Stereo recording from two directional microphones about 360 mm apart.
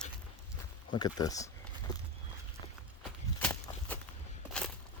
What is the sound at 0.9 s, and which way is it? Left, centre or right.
Speech, centre.